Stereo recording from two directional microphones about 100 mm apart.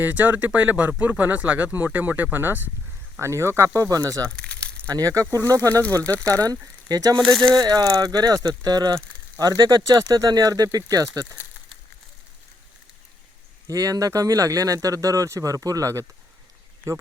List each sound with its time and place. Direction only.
0.0 s speech: 15° right (ahead or behind); by 4.2 s 35° right (ahead or behind)
4.4 s crumpling: 10° left (ahead or behind)
4.9 s speech: 35° right (ahead or behind)
6.0 s speech: 10° left (ahead or behind)
6.2 s speech: 40° right (ahead or behind)
7.2 s speech: 5° left (ahead or behind)
7.5 s speech: 40° right (ahead or behind)
13.7 s speech: 35° right (ahead or behind)